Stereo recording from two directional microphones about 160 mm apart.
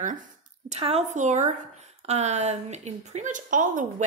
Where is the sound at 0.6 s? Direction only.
40° right (ahead or behind).